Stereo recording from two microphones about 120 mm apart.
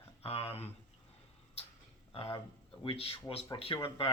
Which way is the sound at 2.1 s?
40° left (ahead or behind).